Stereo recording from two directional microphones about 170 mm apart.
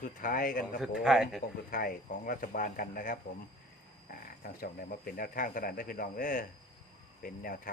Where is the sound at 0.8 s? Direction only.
5° right (ahead or behind).